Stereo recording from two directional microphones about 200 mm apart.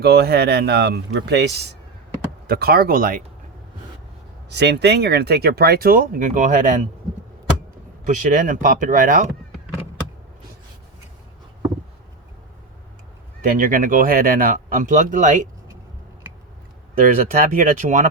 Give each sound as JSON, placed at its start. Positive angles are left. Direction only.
{"t": 0.0, "sound": "speech", "side_deg": -55}
{"t": 4.4, "sound": "speech", "side_deg": -60}
{"t": 8.0, "sound": "speech", "side_deg": -40}
{"t": 13.4, "sound": "speech", "side_deg": -45}
{"t": 17.0, "sound": "speech", "side_deg": -45}